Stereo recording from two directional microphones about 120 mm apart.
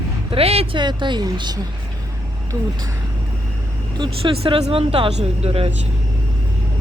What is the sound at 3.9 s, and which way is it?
Speech, 45° right (ahead or behind).